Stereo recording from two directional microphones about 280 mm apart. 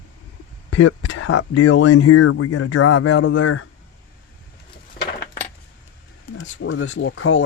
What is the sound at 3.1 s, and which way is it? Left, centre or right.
Speech, left.